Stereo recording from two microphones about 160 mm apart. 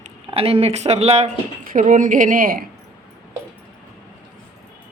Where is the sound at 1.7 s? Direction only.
55° right (ahead or behind).